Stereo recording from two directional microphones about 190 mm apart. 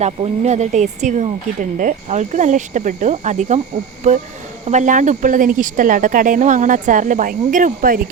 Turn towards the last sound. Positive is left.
turn(degrees=-45)  # may be behind; listen again after turning